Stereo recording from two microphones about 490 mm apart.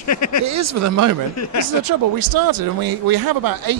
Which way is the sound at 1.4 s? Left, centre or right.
Left.